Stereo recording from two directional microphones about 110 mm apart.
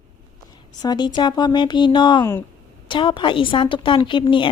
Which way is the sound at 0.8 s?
40° left (ahead or behind).